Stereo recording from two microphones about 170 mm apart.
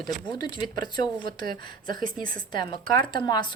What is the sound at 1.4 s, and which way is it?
Speech, 55° right (ahead or behind).